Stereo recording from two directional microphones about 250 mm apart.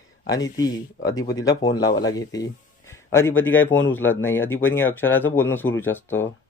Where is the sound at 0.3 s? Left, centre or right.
Centre.